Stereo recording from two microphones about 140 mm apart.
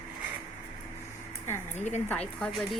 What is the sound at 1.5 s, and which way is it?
Speech, 20° left (ahead or behind).